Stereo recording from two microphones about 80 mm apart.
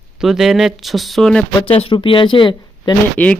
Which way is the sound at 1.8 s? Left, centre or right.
Left.